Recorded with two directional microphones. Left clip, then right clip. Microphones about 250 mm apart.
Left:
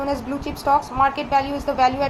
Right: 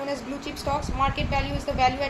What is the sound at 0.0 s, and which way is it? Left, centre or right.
A woman's voice, centre.